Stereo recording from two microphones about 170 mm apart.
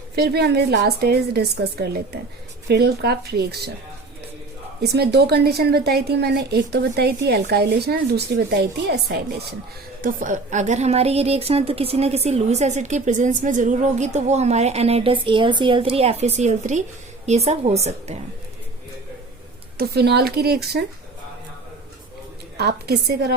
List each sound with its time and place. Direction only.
0.2 s speech: 70° right (ahead or behind)
4.8 s speech: 70° right (ahead or behind)
10.0 s a woman's voice: 50° right (ahead or behind)
19.7 s speech: 65° right (ahead or behind)
22.5 s speech: 70° right (ahead or behind)